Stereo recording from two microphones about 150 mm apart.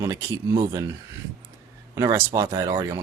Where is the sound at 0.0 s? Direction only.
20° right (ahead or behind).